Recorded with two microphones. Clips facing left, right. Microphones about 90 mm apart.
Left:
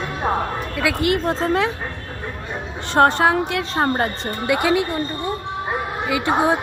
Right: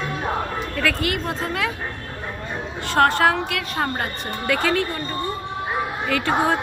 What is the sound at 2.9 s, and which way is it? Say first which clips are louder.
A woman's voice: left 2 dB; 20° left (ahead or behind).